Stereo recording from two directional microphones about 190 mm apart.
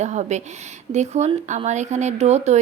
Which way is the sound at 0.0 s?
35° right (ahead or behind).